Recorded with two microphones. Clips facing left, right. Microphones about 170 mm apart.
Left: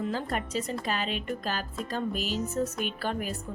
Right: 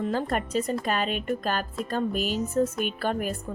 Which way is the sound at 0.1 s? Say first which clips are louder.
Right 4 dB; 50° right (ahead or behind).